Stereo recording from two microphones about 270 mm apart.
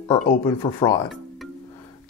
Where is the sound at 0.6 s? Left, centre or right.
Centre.